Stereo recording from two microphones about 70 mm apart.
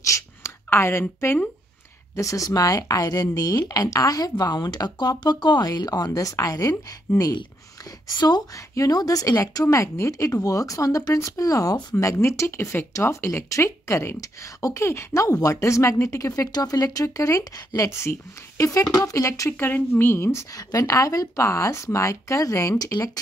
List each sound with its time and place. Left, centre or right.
0.0 s a sound: left
0.7 s speech: left
2.1 s speech: left
8.5 s speech: left
11.9 s speech: left
14.2 s speech: left
16.5 s speech: left
17.0 s speech: left
18.9 s speech: left
19.5 s speech: left
20.5 s speech: left